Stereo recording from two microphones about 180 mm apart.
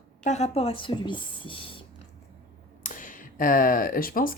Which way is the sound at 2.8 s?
50° left (ahead or behind).